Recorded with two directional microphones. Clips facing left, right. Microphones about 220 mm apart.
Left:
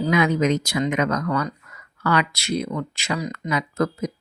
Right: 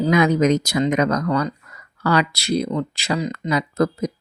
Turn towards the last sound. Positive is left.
turn(degrees=-35)  # may be behind; listen again after turning